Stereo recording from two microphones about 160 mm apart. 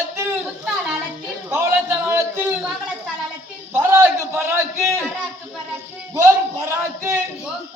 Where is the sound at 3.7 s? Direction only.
15° right (ahead or behind).